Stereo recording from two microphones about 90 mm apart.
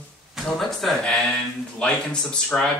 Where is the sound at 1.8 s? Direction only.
10° left (ahead or behind).